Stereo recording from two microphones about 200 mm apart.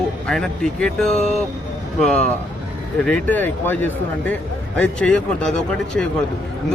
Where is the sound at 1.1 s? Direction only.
35° left (ahead or behind).